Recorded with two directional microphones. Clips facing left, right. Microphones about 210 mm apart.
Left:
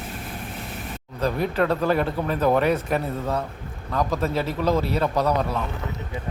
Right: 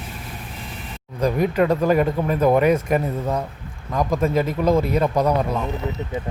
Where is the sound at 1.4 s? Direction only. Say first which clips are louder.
Right 4 dB; 10° right (ahead or behind).